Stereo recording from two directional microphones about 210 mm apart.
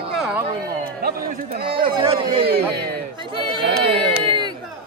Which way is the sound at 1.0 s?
45° right (ahead or behind).